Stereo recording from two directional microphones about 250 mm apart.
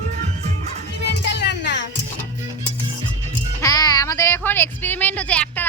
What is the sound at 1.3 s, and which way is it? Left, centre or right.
Music, left.